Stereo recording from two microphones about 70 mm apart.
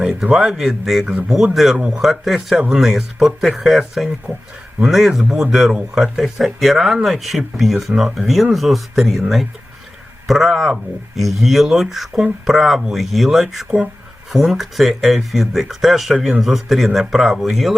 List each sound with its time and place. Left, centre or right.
0.2 s speech: centre
6.1 s speech: centre
10.2 s speech: centre